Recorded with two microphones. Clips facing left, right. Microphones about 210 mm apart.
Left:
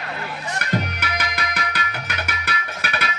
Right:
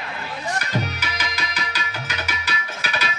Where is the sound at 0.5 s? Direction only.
60° left (ahead or behind).